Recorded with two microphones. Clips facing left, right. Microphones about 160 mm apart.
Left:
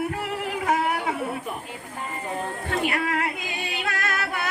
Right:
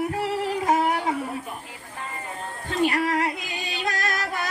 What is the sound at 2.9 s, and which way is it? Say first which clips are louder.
Singing: right 2 dB; 35° right (ahead or behind).